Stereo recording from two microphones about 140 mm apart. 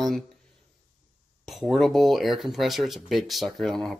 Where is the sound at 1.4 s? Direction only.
Centre (ahead or behind).